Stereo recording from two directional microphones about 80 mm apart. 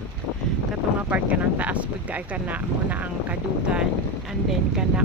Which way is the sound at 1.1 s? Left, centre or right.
Centre.